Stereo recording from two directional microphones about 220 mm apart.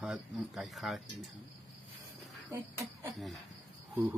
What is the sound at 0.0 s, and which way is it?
Speech, centre (ahead or behind).